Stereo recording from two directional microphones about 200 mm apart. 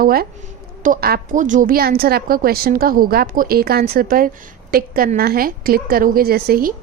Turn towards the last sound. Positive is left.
turn(degrees=-50)  # may be behind; listen again after turning